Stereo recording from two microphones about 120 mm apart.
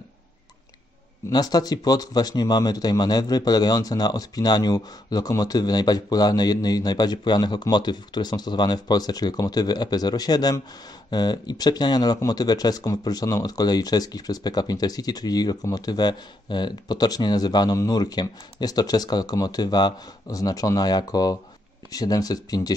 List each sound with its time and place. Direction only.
1.3 s speech: 35° left (ahead or behind)